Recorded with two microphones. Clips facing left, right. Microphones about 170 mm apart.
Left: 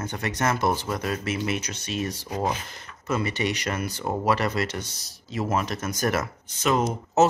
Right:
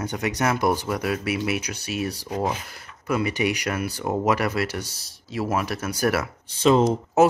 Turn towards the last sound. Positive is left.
turn(degrees=-10)  # may be behind; listen again after turning